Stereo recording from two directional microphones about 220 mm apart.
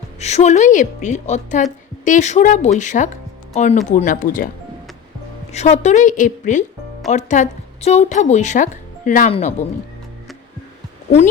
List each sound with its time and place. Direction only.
0.2 s speech: 30° left (ahead or behind)
5.5 s speech: 30° left (ahead or behind)